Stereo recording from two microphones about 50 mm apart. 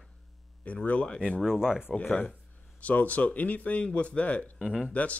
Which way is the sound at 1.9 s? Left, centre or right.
Centre.